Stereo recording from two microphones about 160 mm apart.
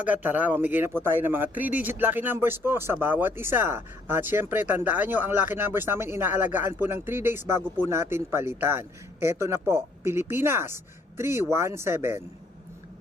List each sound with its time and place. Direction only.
0.0 s speech: 10° right (ahead or behind)